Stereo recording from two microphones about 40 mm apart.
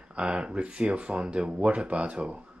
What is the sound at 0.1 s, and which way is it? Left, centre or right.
Speech, right.